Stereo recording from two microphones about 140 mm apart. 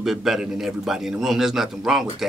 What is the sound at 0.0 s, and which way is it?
A man's voice, 5° right (ahead or behind).